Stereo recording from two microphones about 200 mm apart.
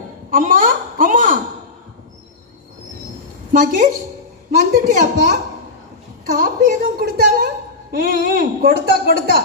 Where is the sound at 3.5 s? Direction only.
40° right (ahead or behind).